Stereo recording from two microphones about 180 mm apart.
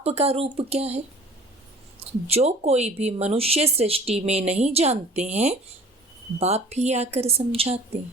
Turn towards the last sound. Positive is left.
turn(degrees=-35)  # may be behind; listen again after turning